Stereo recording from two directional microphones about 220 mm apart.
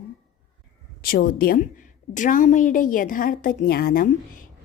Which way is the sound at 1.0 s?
40° left (ahead or behind).